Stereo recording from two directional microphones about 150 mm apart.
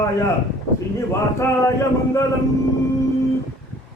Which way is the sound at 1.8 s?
20° left (ahead or behind).